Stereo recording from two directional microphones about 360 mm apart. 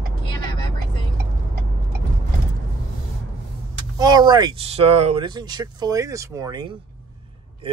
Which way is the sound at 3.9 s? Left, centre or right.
Centre.